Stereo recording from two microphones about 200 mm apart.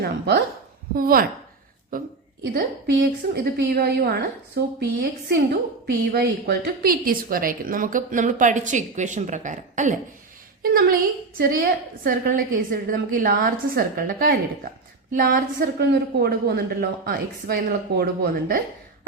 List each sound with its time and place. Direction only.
0.0 s a woman's voice: 50° right (ahead or behind)